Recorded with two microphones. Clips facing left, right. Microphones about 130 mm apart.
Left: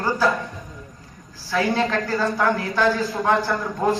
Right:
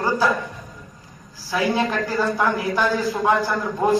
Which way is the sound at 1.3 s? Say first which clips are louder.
Even; 15° right (ahead or behind).